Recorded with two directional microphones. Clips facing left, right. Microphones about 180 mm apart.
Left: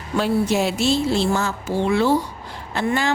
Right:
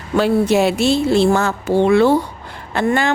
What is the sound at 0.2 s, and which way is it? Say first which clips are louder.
Speech: right 5 dB; 65° right (ahead or behind).